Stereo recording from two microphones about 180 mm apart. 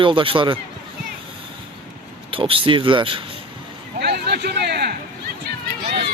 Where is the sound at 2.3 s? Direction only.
30° right (ahead or behind).